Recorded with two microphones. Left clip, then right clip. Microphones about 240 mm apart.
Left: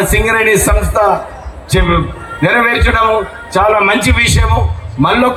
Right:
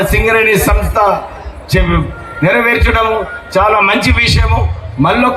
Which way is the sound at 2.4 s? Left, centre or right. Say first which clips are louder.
Even; left.